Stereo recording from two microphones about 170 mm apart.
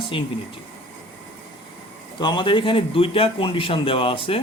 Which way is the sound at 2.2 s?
30° left (ahead or behind).